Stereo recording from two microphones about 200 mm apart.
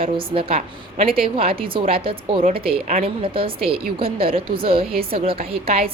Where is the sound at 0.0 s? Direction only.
25° right (ahead or behind).